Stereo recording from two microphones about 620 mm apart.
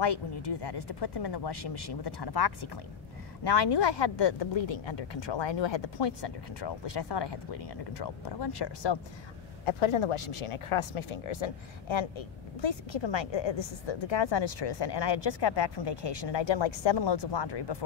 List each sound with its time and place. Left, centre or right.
0.0 s speech: left
9.7 s speech: left